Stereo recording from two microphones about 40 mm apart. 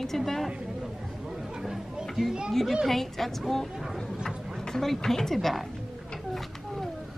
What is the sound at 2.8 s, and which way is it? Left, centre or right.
Speech, centre.